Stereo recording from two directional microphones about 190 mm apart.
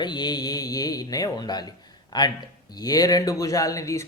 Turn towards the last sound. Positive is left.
turn(degrees=15)  # may be behind; listen again after turning